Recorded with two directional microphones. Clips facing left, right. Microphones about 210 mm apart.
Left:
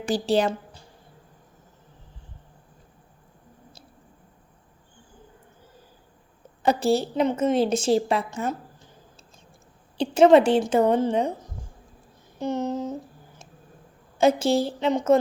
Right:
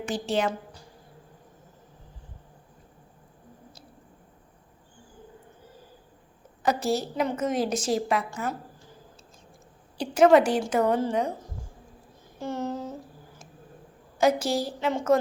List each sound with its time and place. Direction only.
0.0 s a woman's voice: 35° left (ahead or behind)
6.6 s a woman's voice: 30° left (ahead or behind)
10.0 s a woman's voice: 25° left (ahead or behind)
12.4 s a woman's voice: 20° left (ahead or behind)
14.2 s a woman's voice: 25° left (ahead or behind)